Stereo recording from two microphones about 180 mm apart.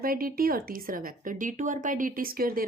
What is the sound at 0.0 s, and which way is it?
A woman's voice, 55° right (ahead or behind).